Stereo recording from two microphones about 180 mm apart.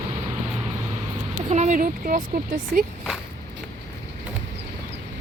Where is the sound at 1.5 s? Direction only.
40° right (ahead or behind).